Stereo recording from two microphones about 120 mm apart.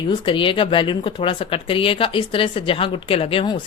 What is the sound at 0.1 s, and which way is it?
Speech, 45° left (ahead or behind).